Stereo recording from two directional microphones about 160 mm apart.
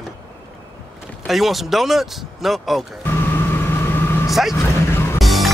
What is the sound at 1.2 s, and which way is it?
Speech, centre (ahead or behind).